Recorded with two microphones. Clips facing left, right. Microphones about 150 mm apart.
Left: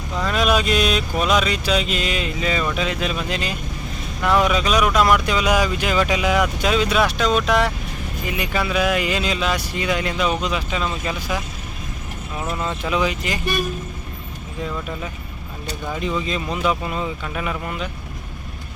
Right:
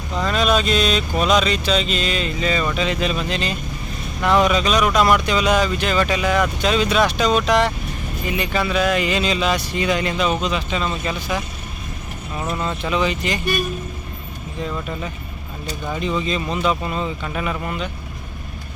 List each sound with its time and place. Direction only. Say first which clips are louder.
0.2 s mantra: right 1 dB; 5° left (ahead or behind)
4.2 s speech: right 2 dB; 5° left (ahead or behind)
15.9 s speech: right 2 dB; 5° left (ahead or behind)